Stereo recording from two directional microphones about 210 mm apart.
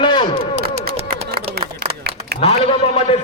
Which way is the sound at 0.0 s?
20° left (ahead or behind).